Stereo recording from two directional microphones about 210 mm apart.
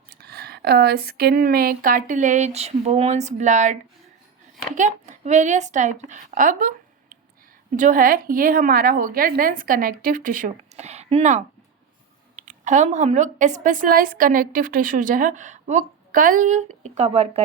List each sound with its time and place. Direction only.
0.1 s a woman's voice: 50° right (ahead or behind); by 17.4 s 30° right (ahead or behind)